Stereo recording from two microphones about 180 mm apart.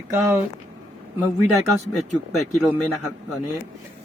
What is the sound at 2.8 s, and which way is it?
Speech, centre (ahead or behind).